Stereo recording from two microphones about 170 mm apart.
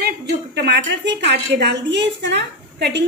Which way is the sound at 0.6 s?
90° right.